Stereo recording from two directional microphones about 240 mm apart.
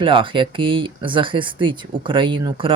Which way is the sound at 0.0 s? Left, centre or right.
Right.